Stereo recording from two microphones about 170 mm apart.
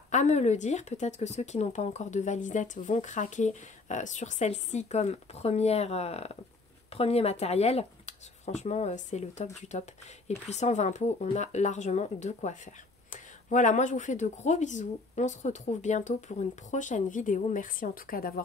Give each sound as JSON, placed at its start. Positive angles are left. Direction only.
{"t": 0.1, "sound": "speech", "side_deg": 45}